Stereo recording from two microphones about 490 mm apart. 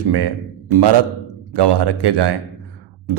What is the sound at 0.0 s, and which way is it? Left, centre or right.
A man's voice, right.